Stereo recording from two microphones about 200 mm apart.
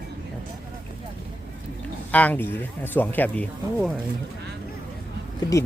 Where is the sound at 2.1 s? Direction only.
10° left (ahead or behind).